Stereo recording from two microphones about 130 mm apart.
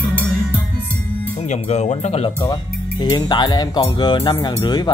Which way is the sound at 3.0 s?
35° left (ahead or behind).